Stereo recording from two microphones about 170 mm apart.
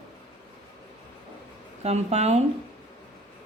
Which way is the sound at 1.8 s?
40° right (ahead or behind).